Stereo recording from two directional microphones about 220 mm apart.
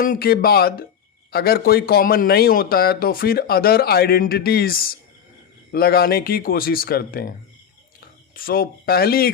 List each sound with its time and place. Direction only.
0.0 s a man's voice: 40° left (ahead or behind)